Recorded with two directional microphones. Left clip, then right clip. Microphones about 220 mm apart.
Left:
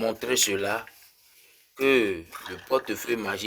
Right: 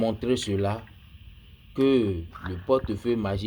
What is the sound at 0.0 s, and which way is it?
Speech, 30° left (ahead or behind).